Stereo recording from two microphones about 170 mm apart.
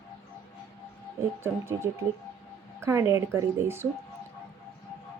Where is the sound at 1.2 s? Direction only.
15° right (ahead or behind).